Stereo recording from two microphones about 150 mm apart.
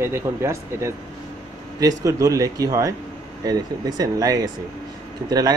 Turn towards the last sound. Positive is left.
turn(degrees=-25)  # may be behind; listen again after turning